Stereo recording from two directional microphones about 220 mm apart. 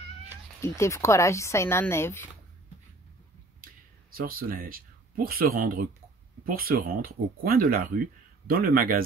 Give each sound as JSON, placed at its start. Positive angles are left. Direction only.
{"t": 0.6, "sound": "speech", "side_deg": 15}
{"t": 4.1, "sound": "speech", "side_deg": -40}